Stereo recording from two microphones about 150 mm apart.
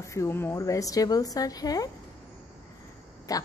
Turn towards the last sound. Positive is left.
turn(degrees=25)  # may be behind; listen again after turning